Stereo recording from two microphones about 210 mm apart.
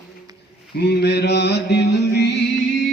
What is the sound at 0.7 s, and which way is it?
Mantra, 50° left (ahead or behind).